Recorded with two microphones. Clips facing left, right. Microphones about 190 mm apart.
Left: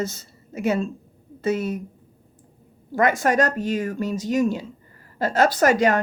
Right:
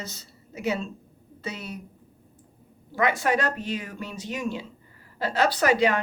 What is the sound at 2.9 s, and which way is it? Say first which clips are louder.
Speech: left 4 dB; 45° left (ahead or behind).